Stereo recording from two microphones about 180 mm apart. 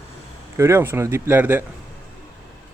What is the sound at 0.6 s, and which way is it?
Speech, 15° right (ahead or behind).